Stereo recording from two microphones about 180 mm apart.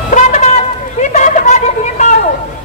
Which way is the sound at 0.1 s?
40° left (ahead or behind).